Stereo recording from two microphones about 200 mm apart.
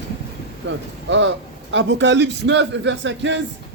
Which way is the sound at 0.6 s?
65° right (ahead or behind).